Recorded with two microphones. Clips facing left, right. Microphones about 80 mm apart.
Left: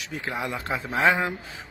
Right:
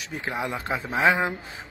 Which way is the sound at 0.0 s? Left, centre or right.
Right.